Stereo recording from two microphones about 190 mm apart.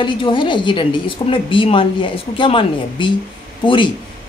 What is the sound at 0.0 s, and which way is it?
Speech, 25° left (ahead or behind).